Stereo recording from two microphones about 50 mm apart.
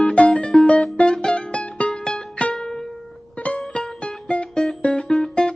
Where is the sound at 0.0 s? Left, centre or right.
Left.